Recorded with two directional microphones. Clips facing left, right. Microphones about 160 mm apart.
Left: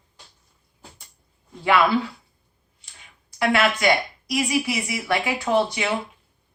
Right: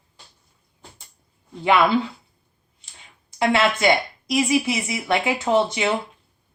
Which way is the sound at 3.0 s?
25° right (ahead or behind).